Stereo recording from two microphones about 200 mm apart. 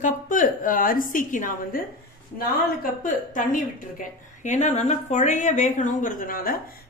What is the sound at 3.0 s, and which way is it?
A woman's voice, 40° left (ahead or behind).